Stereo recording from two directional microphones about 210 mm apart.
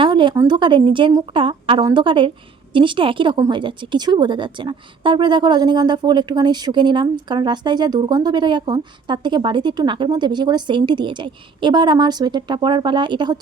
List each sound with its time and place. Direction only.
0.0 s a woman's voice: 25° right (ahead or behind)